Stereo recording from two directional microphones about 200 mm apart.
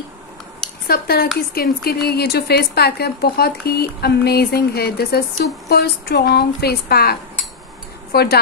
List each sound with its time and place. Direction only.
0.8 s a woman's voice: 50° left (ahead or behind)